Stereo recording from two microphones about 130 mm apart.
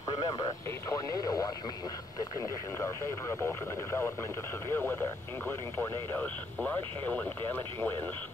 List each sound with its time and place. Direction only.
0.1 s speech: 30° left (ahead or behind)
2.8 s speech: 20° left (ahead or behind)
5.5 s speech: 15° left (ahead or behind)